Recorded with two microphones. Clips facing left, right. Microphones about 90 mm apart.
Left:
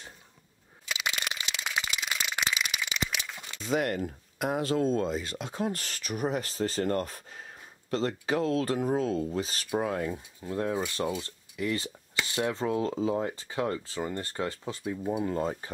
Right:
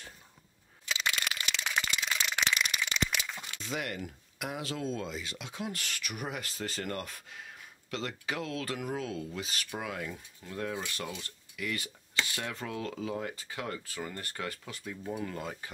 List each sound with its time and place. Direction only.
0.8 s crushing: 10° left (ahead or behind)
1.1 s a sound: 20° left (ahead or behind)
3.6 s speech: 45° left (ahead or behind)